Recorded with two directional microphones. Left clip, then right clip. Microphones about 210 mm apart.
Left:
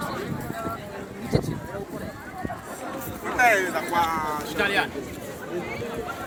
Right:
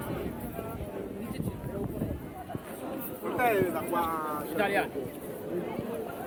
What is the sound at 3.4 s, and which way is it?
Speech, 45° left (ahead or behind).